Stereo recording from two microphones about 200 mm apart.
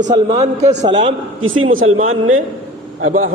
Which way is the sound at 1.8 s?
35° right (ahead or behind).